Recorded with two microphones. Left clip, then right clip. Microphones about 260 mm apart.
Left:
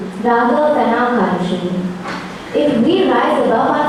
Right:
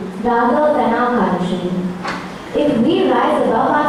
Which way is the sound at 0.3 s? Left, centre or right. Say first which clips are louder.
Left 1 dB; centre.